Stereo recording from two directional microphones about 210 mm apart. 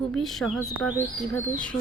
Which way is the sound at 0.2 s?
Centre (ahead or behind).